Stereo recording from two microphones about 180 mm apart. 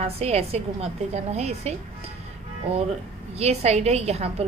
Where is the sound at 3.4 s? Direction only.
35° right (ahead or behind).